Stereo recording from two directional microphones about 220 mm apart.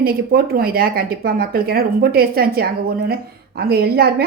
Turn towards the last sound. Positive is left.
turn(degrees=-45)  # may be behind; listen again after turning